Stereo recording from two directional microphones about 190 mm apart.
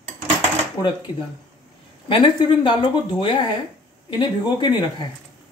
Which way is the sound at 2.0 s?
25° left (ahead or behind).